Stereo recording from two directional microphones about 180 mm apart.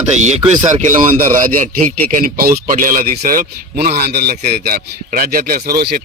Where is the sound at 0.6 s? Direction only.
45° right (ahead or behind).